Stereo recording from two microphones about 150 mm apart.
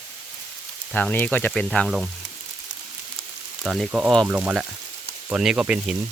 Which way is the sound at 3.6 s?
5° right (ahead or behind).